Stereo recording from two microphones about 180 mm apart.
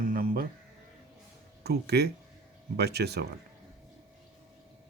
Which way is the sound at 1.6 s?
60° right (ahead or behind).